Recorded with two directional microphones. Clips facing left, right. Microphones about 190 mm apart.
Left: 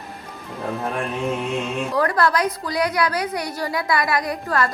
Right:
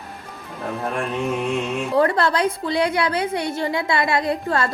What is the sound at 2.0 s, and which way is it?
A woman's voice, 25° right (ahead or behind).